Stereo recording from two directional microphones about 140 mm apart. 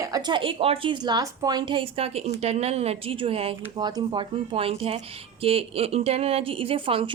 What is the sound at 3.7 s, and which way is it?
Speech, 30° right (ahead or behind).